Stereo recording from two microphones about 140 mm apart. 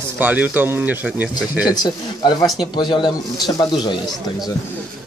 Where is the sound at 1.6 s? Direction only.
30° left (ahead or behind).